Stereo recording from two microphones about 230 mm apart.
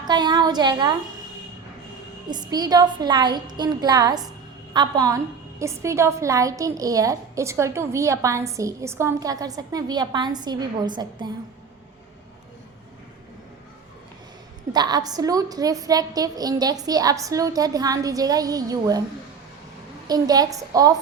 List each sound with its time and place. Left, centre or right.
0.1 s a woman's voice: centre
2.3 s a woman's voice: centre
14.7 s a woman's voice: centre
20.1 s a woman's voice: centre